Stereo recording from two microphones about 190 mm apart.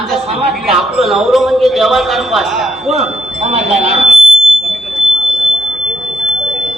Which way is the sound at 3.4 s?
35° right (ahead or behind).